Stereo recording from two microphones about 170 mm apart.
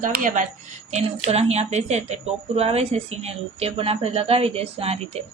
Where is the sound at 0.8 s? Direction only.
40° right (ahead or behind).